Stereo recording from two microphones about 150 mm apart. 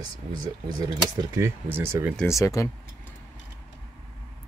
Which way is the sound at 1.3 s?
15° right (ahead or behind).